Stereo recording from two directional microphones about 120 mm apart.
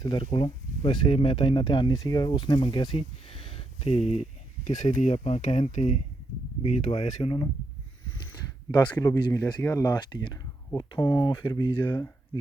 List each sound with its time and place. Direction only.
0.0 s speech: 40° left (ahead or behind); by 5.1 s 80° left
5.1 s speech: 60° left (ahead or behind)
8.0 s a sound: 40° left (ahead or behind)
9.0 s speech: 30° left (ahead or behind)